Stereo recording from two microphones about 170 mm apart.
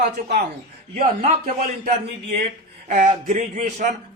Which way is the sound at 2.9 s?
50° right (ahead or behind).